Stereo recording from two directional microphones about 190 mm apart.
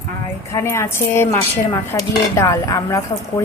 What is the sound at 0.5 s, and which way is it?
A woman's voice, 15° left (ahead or behind).